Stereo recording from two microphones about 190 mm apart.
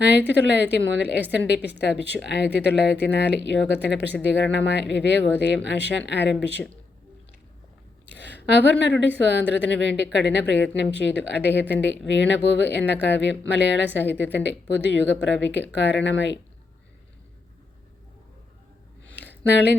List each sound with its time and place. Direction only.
0.1 s speech: 65° left (ahead or behind)
8.0 s a sound: 65° left (ahead or behind)
8.8 s speech: 65° left (ahead or behind)